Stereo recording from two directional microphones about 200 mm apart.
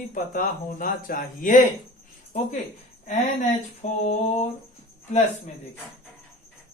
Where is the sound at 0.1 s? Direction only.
40° left (ahead or behind).